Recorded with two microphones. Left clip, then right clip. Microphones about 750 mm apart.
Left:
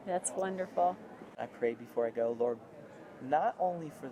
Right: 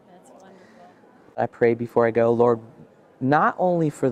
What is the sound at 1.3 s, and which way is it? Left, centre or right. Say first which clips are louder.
Speech: right 15 dB; right.